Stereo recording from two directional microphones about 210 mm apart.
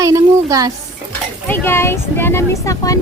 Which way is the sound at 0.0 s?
15° right (ahead or behind).